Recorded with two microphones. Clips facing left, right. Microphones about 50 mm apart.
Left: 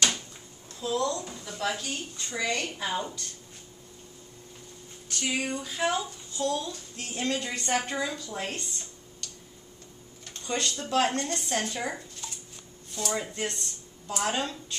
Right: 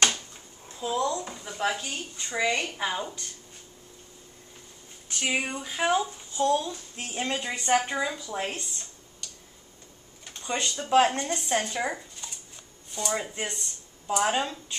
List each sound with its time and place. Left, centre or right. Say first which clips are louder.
0.7 s speech: right 1 dB; right
2.9 s speech: even; centre
5.0 s speech: right 2 dB; right; by 8.8 s centre
9.2 s tick-tock: even; centre
10.2 s speech: even; centre